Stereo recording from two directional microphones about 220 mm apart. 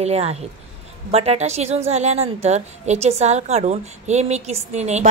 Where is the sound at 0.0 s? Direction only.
30° right (ahead or behind).